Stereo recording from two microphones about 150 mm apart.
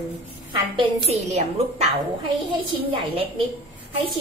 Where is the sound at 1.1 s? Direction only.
45° right (ahead or behind).